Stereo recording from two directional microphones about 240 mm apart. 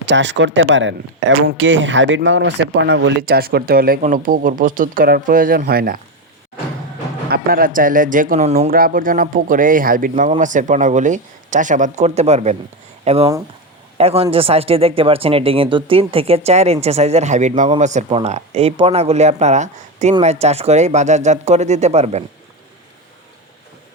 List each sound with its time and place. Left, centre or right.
0.1 s speech: right
7.3 s speech: right